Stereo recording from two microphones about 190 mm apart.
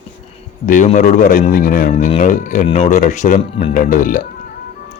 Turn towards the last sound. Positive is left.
turn(degrees=45)  # may be behind; listen again after turning